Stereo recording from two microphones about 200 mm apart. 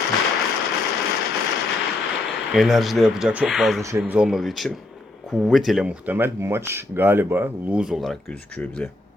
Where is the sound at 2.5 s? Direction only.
Centre (ahead or behind).